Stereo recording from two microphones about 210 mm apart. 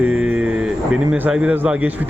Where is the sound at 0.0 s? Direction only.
5° right (ahead or behind).